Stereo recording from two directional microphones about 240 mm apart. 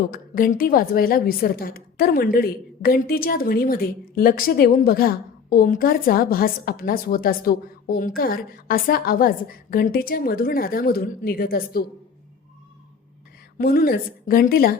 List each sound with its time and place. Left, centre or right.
0.1 s a woman's voice: left
13.6 s a woman's voice: left